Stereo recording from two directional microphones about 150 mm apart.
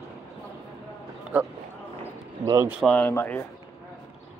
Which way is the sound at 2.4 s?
25° right (ahead or behind).